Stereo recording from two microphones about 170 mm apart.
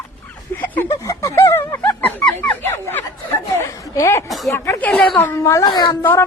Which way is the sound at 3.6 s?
15° left (ahead or behind).